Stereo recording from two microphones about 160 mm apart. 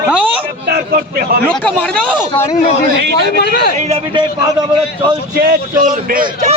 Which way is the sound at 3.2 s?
90° left.